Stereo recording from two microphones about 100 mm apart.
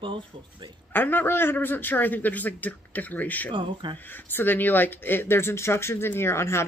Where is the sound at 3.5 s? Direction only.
55° right (ahead or behind).